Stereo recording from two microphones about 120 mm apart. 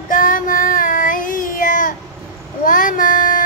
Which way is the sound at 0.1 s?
90° left.